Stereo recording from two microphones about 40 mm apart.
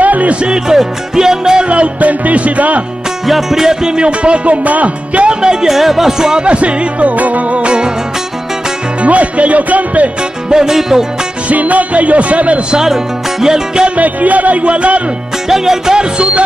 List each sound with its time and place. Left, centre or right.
0.0 s music: right
0.4 s music: right
1.7 s music: right
3.3 s music: centre
3.9 s music: right
5.7 s music: centre
6.4 s music: right
9.0 s music: right
10.5 s music: centre
11.4 s music: right
12.7 s music: centre
13.8 s music: right
15.4 s music: centre
16.0 s music: right